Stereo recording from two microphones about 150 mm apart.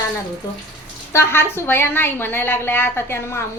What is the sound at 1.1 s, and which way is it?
A woman's voice, 15° left (ahead or behind).